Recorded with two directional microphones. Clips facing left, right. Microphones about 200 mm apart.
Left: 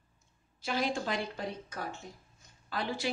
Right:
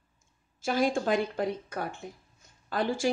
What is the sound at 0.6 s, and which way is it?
Speech, 50° right (ahead or behind).